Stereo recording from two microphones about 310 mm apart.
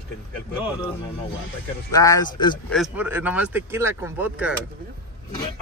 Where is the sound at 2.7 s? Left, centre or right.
Centre.